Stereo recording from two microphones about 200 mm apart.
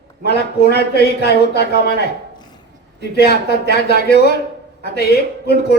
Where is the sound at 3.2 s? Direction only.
55° left (ahead or behind).